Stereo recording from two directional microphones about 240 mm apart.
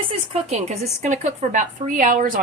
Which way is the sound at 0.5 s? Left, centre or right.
Right.